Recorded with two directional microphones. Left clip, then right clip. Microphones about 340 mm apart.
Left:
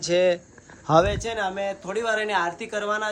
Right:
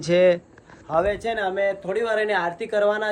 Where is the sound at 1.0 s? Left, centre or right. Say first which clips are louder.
Right 1 dB; centre.